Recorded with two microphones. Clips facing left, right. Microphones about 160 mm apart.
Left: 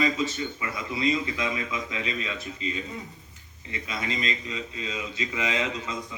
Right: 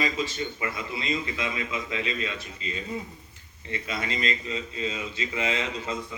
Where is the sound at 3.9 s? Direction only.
30° right (ahead or behind).